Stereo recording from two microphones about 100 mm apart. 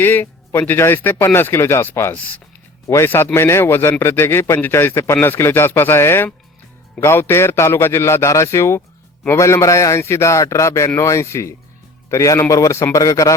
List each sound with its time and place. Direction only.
0.0 s a man's voice: 20° left (ahead or behind)
2.8 s a man's voice: 30° left (ahead or behind)